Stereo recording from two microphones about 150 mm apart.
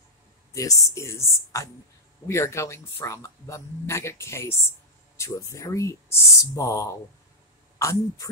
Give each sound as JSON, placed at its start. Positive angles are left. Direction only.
{"t": 0.6, "sound": "speech", "side_deg": 20}